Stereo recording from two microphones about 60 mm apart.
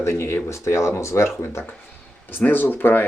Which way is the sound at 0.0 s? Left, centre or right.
Left.